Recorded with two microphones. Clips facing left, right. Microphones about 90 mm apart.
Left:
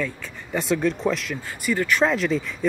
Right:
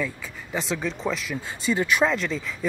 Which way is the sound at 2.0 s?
Centre (ahead or behind).